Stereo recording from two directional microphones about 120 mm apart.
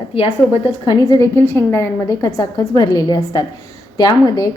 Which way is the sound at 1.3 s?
20° left (ahead or behind).